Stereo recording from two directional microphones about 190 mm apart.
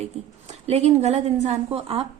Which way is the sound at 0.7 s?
35° right (ahead or behind).